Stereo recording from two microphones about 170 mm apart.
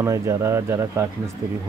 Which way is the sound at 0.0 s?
20° right (ahead or behind).